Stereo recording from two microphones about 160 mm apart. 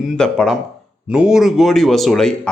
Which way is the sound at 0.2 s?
Centre (ahead or behind).